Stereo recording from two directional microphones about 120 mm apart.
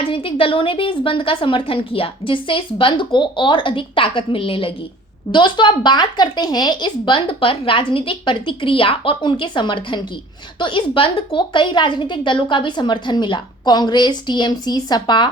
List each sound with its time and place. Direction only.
0.0 s a woman's voice: 50° left (ahead or behind)